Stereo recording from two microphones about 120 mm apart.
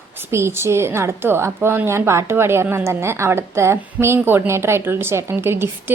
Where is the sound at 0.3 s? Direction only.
20° right (ahead or behind).